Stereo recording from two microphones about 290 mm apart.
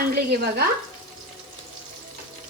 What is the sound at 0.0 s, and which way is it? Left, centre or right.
Speech, right.